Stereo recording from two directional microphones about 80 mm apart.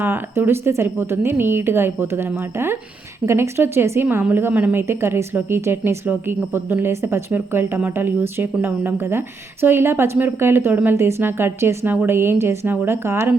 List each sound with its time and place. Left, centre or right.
0.0 s a woman's voice: right